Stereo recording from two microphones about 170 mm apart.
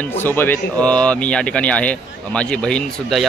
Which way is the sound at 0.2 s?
15° left (ahead or behind).